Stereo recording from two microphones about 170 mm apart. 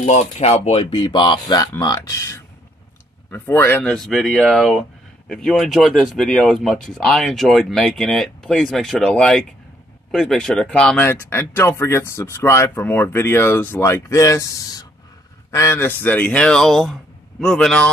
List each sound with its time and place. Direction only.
0.0 s speech: 40° left (ahead or behind); by 3.9 s 15° left (ahead or behind)
3.9 s speech: centre (ahead or behind)